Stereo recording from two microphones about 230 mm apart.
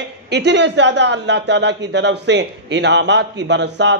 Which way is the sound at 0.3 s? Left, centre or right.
Right.